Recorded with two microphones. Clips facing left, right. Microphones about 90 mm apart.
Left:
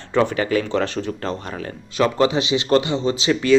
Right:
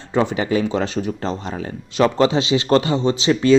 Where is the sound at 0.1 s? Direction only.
20° right (ahead or behind).